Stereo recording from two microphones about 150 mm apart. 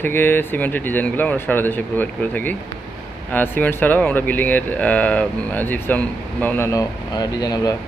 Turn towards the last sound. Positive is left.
turn(degrees=25)  # may be behind; listen again after turning